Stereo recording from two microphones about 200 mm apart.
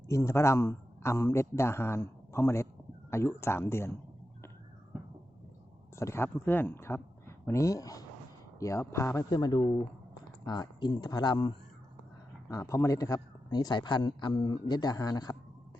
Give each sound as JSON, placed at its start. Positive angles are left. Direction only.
{"t": 0.1, "sound": "a man's voice", "side_deg": 15}
{"t": 6.0, "sound": "a man's voice", "side_deg": 15}